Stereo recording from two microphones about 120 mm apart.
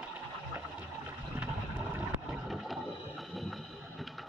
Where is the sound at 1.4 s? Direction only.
15° right (ahead or behind).